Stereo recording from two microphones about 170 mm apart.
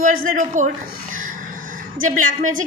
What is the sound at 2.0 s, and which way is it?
Speech, 50° right (ahead or behind).